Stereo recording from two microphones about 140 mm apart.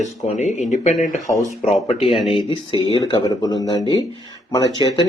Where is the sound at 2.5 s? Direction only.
40° left (ahead or behind).